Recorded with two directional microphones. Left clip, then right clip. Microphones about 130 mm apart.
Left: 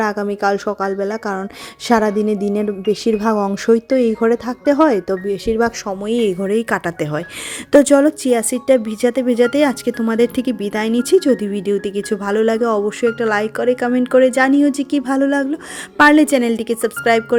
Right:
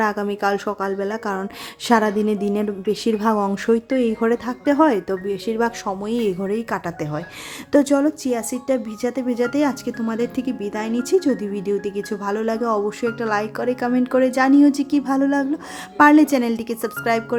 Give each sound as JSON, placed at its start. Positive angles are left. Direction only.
{"t": 0.0, "sound": "speech", "side_deg": 30}
{"t": 5.8, "sound": "speech", "side_deg": 20}